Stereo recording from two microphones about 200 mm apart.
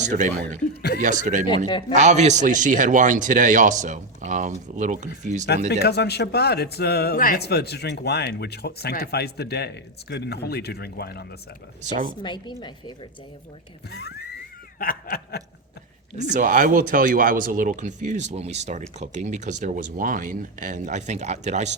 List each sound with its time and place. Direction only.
0.0 s speech: 40° right (ahead or behind)
0.6 s speech: 50° left (ahead or behind)
0.9 s speech: 40° right (ahead or behind)
5.8 s speech: 55° left (ahead or behind)
11.8 s speech: 40° right (ahead or behind)
12.2 s a woman's voice: 20° left (ahead or behind)
13.9 s speech: 55° left (ahead or behind)
16.1 s speech: 40° right (ahead or behind)